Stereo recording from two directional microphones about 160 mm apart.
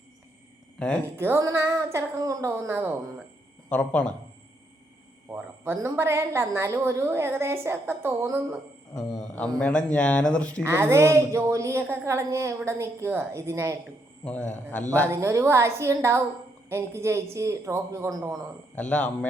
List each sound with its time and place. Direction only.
0.8 s speech: 5° left (ahead or behind)
1.0 s a woman's voice: 15° right (ahead or behind)
3.7 s speech: 5° left (ahead or behind)
5.3 s a woman's voice: 15° right (ahead or behind)
9.0 s a man's voice: centre (ahead or behind)
10.6 s a woman's voice: 15° right (ahead or behind)
14.3 s speech: 10° left (ahead or behind)
15.1 s a woman's voice: 20° right (ahead or behind)
18.8 s speech: 5° left (ahead or behind)